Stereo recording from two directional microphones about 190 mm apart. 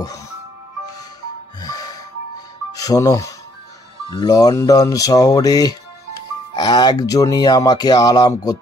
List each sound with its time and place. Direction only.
1.6 s music: 20° left (ahead or behind)
2.7 s speech: 20° left (ahead or behind)